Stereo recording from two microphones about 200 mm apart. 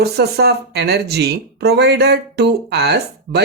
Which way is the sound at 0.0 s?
55° right (ahead or behind).